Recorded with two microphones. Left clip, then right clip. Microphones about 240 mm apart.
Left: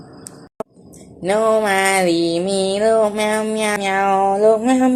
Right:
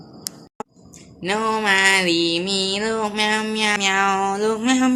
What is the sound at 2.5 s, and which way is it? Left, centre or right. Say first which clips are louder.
Music: left 6 dB; centre.